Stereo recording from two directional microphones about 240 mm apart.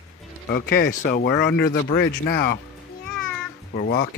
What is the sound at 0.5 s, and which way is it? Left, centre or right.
Speech, left.